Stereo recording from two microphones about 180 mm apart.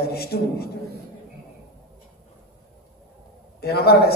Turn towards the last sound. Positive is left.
turn(degrees=60)  # may be behind; listen again after turning